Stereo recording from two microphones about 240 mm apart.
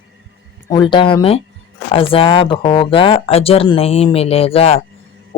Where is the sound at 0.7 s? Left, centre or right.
Centre.